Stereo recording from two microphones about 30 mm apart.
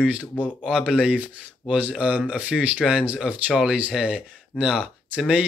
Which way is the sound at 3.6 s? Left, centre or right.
Right.